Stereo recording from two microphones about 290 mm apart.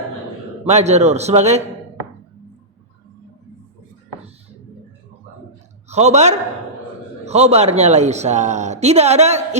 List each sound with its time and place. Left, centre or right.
0.6 s a man's voice: right
5.9 s a man's voice: right